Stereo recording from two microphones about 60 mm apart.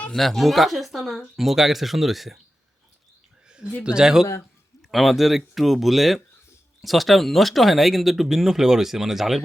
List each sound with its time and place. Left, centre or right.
0.1 s speech: centre
3.8 s speech: centre